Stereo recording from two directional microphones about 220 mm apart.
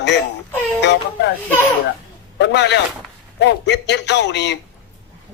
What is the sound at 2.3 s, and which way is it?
A man's voice, 50° left (ahead or behind).